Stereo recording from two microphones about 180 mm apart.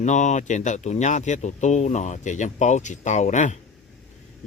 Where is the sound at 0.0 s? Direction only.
40° left (ahead or behind).